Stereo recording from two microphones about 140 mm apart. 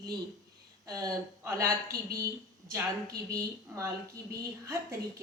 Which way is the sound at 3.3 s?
20° right (ahead or behind).